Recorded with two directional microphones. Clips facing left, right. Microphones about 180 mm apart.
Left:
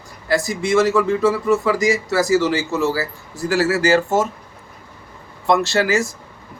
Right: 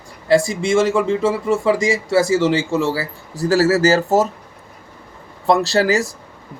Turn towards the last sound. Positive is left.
turn(degrees=-35)  # may be behind; listen again after turning